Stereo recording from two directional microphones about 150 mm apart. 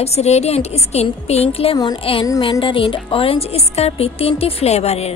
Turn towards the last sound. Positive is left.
turn(degrees=45)  # may be behind; listen again after turning